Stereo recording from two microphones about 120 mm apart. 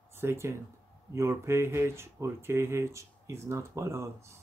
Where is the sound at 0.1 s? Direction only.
20° right (ahead or behind).